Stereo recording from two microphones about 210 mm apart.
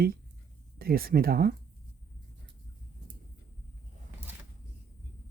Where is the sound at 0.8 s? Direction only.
45° right (ahead or behind).